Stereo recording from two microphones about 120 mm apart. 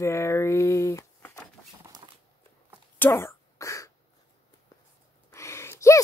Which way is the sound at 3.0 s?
20° left (ahead or behind).